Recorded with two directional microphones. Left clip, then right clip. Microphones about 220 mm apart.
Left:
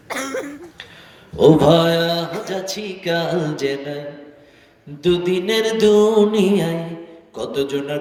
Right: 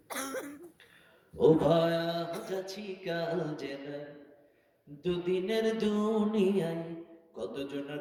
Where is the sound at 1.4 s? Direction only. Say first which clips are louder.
Left 12 dB; 50° left (ahead or behind).